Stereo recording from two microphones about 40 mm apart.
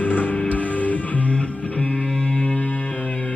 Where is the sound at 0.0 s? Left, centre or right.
Left.